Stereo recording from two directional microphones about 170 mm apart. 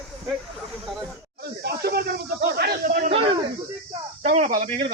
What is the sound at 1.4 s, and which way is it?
Speech, 70° right (ahead or behind).